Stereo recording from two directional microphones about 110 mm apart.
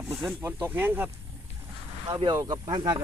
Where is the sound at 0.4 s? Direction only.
20° right (ahead or behind).